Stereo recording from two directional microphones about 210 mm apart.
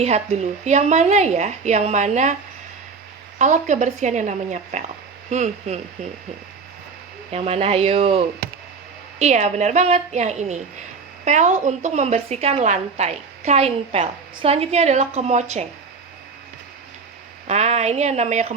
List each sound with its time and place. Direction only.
0.0 s a woman's voice: 30° right (ahead or behind)
3.3 s a woman's voice: 35° right (ahead or behind)
7.3 s a woman's voice: 30° right (ahead or behind)
17.4 s speech: 30° right (ahead or behind)